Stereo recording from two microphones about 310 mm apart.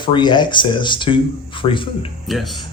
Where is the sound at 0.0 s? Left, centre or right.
Centre.